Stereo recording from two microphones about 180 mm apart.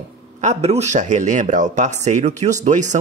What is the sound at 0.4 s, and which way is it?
Speech, 35° right (ahead or behind).